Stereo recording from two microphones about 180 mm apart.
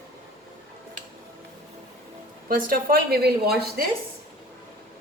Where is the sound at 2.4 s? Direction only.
50° right (ahead or behind).